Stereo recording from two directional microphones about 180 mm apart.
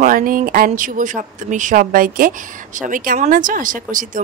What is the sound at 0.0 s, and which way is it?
Speech, 50° right (ahead or behind).